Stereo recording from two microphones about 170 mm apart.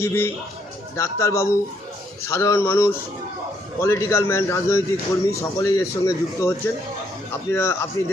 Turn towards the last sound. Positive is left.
turn(degrees=15)  # may be behind; listen again after turning